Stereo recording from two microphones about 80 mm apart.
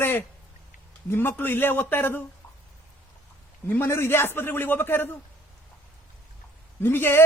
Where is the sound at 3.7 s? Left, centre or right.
Left.